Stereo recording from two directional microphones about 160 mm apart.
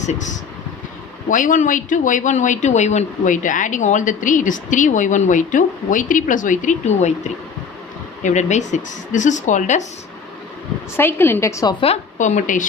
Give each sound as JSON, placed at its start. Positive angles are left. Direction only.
{"t": 0.0, "sound": "speech", "side_deg": 45}
{"t": 1.3, "sound": "speech", "side_deg": 55}
{"t": 8.2, "sound": "speech", "side_deg": 45}
{"t": 10.9, "sound": "a woman's voice", "side_deg": 15}
{"t": 11.8, "sound": "speech", "side_deg": 45}